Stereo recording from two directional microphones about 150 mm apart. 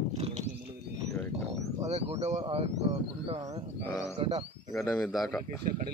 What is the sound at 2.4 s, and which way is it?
Speech, 40° right (ahead or behind).